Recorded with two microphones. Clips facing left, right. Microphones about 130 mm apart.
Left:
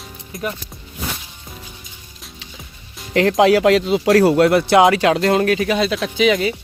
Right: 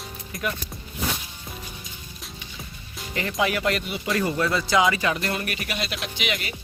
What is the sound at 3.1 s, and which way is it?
Speech, 90° left.